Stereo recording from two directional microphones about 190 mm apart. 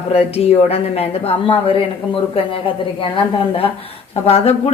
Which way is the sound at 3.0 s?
25° left (ahead or behind).